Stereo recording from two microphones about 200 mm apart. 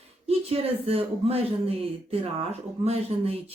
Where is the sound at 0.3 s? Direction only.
30° right (ahead or behind).